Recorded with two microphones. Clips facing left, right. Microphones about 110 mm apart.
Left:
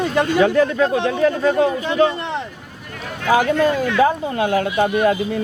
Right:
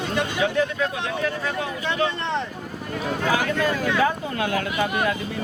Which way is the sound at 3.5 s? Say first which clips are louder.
Left 6 dB; 20° left (ahead or behind).